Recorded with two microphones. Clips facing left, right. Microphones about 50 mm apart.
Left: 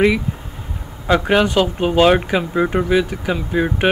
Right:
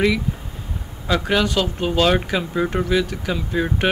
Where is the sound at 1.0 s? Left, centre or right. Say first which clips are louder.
Left 5 dB; left.